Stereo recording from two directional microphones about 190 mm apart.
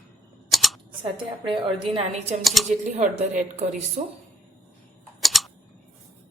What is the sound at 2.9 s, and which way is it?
A woman's voice, 35° right (ahead or behind).